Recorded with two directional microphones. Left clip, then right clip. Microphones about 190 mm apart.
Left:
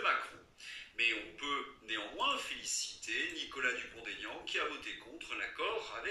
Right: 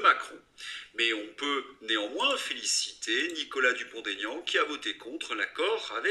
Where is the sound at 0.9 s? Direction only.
45° right (ahead or behind).